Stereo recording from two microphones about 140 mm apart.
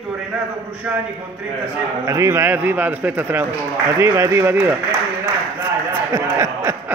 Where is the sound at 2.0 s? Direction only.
20° right (ahead or behind).